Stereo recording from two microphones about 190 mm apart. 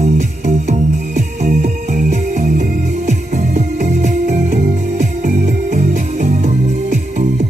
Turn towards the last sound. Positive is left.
turn(degrees=-40)  # may be behind; listen again after turning